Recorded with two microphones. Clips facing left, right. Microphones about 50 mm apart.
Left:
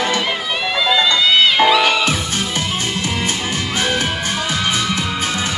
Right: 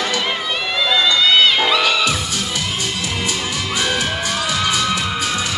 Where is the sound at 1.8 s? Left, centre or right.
Left.